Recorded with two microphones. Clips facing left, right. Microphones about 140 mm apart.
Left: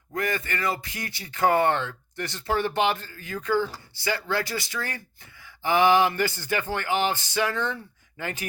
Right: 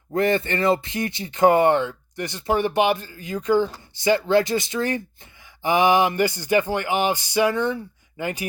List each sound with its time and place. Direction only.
0.1 s speech: 30° right (ahead or behind)